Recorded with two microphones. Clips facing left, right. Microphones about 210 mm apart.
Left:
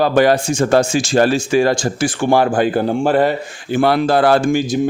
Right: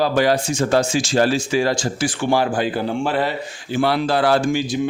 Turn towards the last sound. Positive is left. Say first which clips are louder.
# left 4 dB
turn(degrees=45)  # may be behind; listen again after turning